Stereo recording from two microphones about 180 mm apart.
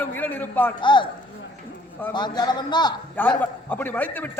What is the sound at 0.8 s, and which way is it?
Speech, 25° left (ahead or behind).